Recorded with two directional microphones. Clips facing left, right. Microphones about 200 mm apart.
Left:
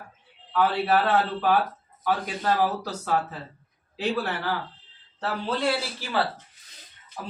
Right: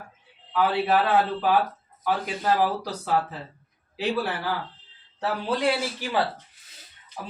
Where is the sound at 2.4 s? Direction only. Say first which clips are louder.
Right 2 dB; 10° right (ahead or behind).